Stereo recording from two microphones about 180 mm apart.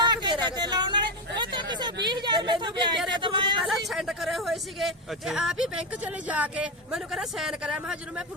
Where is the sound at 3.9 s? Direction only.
Centre (ahead or behind).